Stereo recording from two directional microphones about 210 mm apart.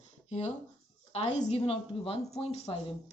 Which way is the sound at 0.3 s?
30° left (ahead or behind).